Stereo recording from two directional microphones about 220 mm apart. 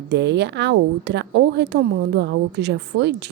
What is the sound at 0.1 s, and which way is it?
Speech, 50° right (ahead or behind).